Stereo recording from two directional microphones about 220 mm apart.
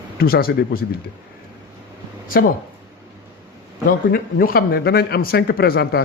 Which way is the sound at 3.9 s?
40° left (ahead or behind).